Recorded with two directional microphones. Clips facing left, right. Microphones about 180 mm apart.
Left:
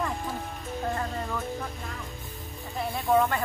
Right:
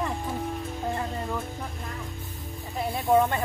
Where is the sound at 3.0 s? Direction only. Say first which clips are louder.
Right 2 dB; 20° right (ahead or behind).